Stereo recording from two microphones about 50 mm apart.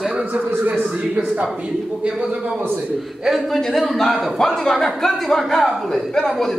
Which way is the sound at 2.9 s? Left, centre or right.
Centre.